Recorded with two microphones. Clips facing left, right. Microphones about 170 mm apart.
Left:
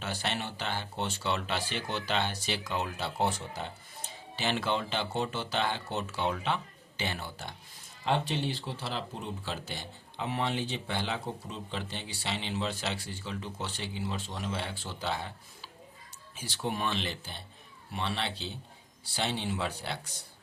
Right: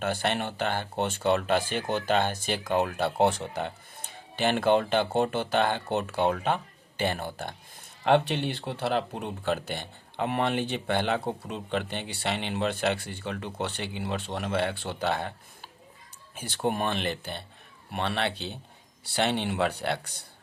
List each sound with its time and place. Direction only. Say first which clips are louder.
0.0 s speech: right 7 dB; 55° right (ahead or behind)